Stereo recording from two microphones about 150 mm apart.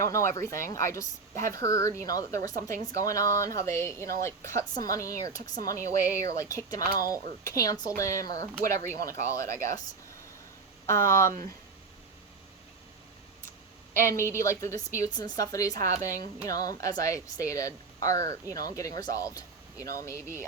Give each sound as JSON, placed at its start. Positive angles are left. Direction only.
{"t": 0.3, "sound": "speech", "side_deg": 20}
{"t": 6.8, "sound": "speech", "side_deg": -75}
{"t": 7.1, "sound": "speech", "side_deg": 25}
{"t": 10.8, "sound": "speech", "side_deg": 20}
{"t": 13.9, "sound": "a woman's voice", "side_deg": 20}